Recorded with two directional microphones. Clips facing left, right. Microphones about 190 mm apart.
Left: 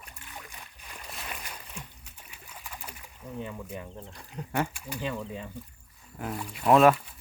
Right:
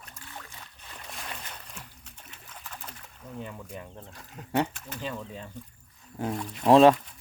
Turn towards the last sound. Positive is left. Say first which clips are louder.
# right 3 dB
turn(degrees=-30)  # may be behind; listen again after turning